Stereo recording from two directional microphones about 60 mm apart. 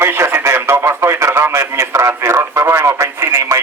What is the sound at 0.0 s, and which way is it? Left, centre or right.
Radio, right.